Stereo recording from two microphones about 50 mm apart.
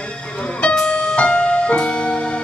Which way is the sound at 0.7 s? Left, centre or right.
Centre.